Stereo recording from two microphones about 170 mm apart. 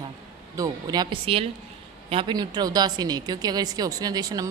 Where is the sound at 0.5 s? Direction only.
20° right (ahead or behind).